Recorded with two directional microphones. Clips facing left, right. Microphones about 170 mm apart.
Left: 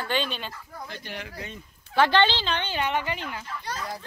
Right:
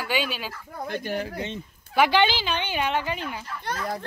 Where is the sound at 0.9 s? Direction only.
50° right (ahead or behind).